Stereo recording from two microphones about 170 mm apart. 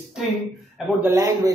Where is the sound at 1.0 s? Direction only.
20° right (ahead or behind).